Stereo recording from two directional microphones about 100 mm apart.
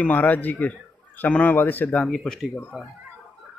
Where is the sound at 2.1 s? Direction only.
Centre (ahead or behind).